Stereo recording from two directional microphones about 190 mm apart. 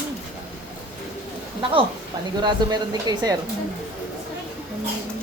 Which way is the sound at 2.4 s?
20° right (ahead or behind).